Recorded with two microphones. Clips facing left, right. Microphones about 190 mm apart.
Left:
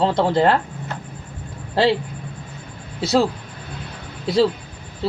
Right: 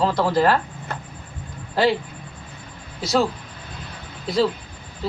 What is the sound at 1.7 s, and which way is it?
Speech, 30° left (ahead or behind).